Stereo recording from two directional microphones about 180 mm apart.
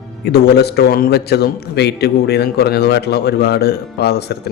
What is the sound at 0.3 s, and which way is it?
A man's voice, 65° left (ahead or behind).